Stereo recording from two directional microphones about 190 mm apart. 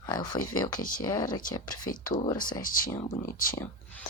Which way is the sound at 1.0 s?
20° left (ahead or behind).